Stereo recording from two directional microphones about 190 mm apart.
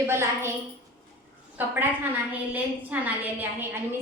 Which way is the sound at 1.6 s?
10° right (ahead or behind).